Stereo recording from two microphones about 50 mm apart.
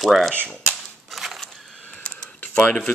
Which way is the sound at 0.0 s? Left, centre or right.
Centre.